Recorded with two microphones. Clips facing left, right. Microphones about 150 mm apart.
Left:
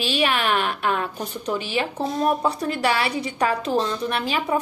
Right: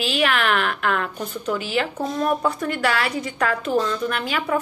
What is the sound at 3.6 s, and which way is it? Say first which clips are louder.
Speech: right 1 dB; 25° left (ahead or behind).